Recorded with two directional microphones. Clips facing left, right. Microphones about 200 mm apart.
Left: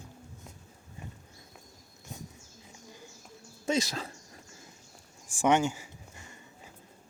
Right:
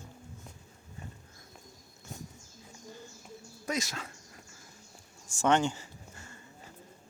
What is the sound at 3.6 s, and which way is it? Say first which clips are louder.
Speech: left 5 dB; 30° left (ahead or behind).